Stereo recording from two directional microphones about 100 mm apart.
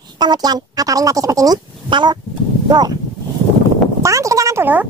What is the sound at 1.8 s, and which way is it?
Speech, 50° right (ahead or behind).